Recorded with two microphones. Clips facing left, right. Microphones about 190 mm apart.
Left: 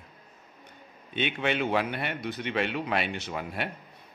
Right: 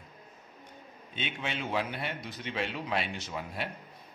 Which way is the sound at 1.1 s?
65° left (ahead or behind).